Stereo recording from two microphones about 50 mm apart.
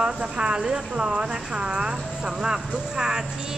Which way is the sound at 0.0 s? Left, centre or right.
Centre.